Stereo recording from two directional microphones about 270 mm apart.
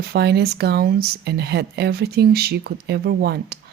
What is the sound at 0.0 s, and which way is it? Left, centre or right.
Speech, right.